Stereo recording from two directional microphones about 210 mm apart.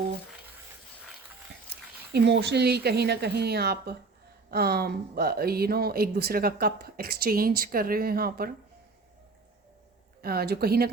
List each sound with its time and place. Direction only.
2.1 s speech: 55° right (ahead or behind)
10.2 s speech: 45° right (ahead or behind)